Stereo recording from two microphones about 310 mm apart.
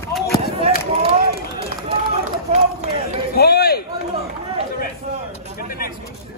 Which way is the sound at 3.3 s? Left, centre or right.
Left.